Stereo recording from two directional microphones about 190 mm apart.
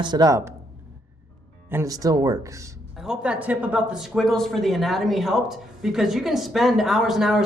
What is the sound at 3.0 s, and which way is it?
Speech, 5° right (ahead or behind).